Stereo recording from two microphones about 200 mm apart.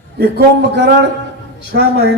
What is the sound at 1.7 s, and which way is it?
Speech, 60° right (ahead or behind).